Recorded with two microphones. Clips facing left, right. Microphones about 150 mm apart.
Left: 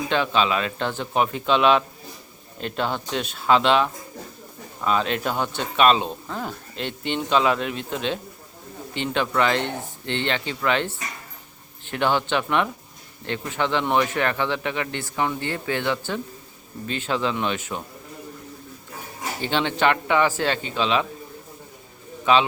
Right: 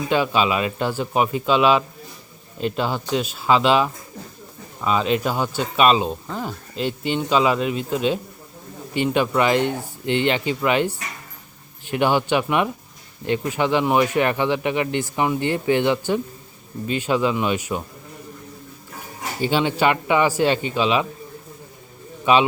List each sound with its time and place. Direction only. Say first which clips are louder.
0.1 s speech: right 2 dB; 10° right (ahead or behind)
19.4 s speech: right 3 dB; 10° right (ahead or behind)
22.3 s speech: right 2 dB; 15° right (ahead or behind)